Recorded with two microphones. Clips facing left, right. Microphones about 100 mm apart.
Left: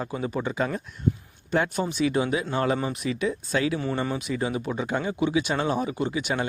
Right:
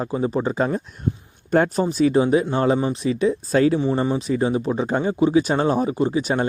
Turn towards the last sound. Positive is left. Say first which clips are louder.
# right 6 dB
turn(degrees=-35)  # may be behind; listen again after turning